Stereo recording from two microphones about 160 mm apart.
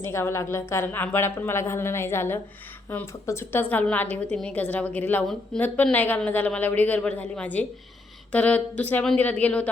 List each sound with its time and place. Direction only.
0.0 s a woman's voice: 15° left (ahead or behind)